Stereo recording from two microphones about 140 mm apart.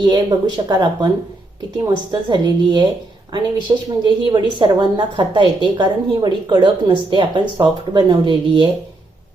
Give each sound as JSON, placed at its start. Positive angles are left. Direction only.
{"t": 0.0, "sound": "a woman's voice", "side_deg": -30}